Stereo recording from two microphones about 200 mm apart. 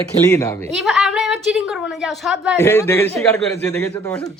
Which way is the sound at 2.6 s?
10° left (ahead or behind).